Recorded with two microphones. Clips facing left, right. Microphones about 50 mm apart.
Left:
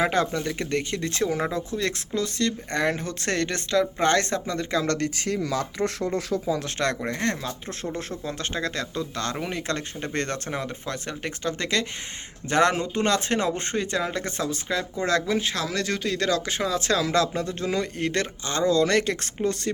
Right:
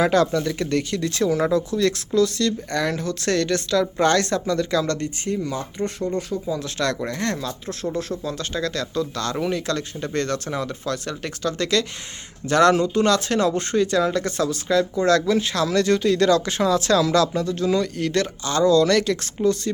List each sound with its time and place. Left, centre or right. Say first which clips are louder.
0.0 s speech: right 5 dB; left
4.9 s speech: right 1 dB; left
7.0 s speech: right 2 dB; left
17.1 s speech: right 4 dB; left